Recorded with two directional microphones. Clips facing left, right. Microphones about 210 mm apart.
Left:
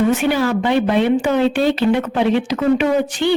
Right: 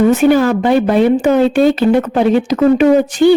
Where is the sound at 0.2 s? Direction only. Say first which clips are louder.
Right 7 dB; 45° right (ahead or behind).